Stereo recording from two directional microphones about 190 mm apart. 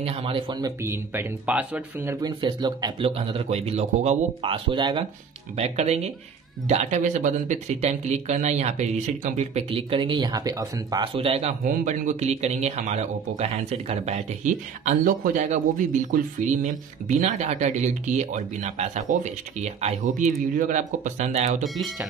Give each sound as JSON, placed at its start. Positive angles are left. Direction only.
{"t": 0.0, "sound": "speech", "side_deg": -30}
{"t": 2.4, "sound": "a man's voice", "side_deg": -25}
{"t": 11.1, "sound": "speech", "side_deg": -30}
{"t": 21.6, "sound": "speech", "side_deg": 0}